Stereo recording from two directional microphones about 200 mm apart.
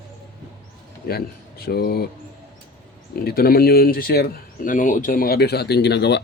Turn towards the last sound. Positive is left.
turn(degrees=55)  # may be behind; listen again after turning